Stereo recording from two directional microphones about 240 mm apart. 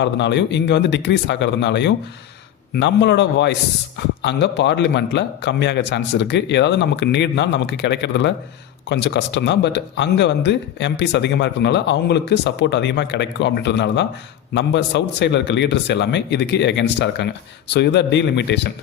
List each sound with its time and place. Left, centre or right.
0.0 s a man's voice: left